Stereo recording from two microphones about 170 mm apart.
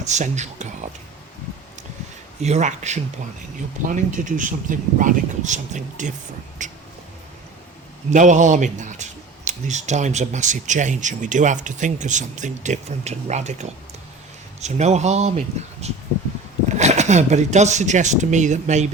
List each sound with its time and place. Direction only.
0.0 s speech: 45° right (ahead or behind)
2.4 s speech: 40° right (ahead or behind)
6.6 s a sound: 45° right (ahead or behind)
8.1 s speech: 45° right (ahead or behind)